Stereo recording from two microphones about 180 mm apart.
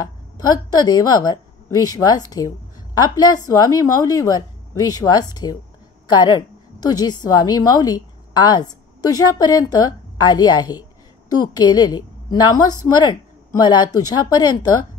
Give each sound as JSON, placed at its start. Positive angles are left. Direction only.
{"t": 0.5, "sound": "a woman's voice", "side_deg": 20}